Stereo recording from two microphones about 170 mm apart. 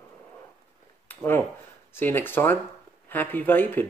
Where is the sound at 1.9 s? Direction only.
10° left (ahead or behind).